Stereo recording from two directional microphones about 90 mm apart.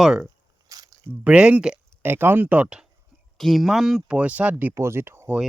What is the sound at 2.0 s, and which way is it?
Speech, 20° right (ahead or behind).